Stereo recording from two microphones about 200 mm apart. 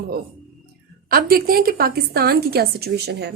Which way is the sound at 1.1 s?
45° right (ahead or behind).